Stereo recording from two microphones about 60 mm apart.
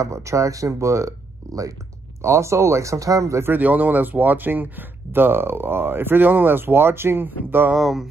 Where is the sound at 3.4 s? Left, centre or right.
Right.